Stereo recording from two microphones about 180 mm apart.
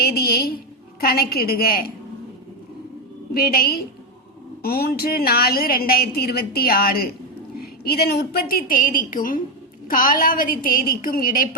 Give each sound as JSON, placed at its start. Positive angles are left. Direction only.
{"t": 0.0, "sound": "a woman's voice", "side_deg": 60}
{"t": 3.3, "sound": "a woman's voice", "side_deg": 55}